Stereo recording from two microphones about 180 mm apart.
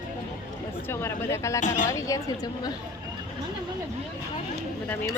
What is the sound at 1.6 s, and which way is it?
Speech, 45° left (ahead or behind).